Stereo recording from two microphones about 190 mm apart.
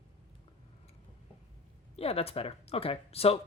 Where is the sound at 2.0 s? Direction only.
30° left (ahead or behind).